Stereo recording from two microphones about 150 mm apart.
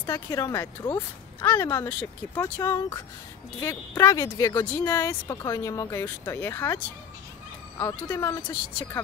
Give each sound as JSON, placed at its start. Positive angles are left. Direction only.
{"t": 0.0, "sound": "speech", "side_deg": 20}
{"t": 7.8, "sound": "speech", "side_deg": 20}